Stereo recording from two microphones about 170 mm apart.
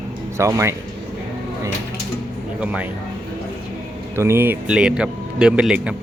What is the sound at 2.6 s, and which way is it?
Speech, 10° right (ahead or behind).